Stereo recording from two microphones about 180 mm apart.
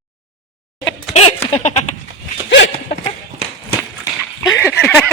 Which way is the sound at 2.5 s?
75° left (ahead or behind).